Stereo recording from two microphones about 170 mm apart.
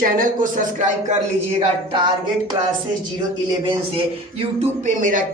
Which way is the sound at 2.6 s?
30° right (ahead or behind).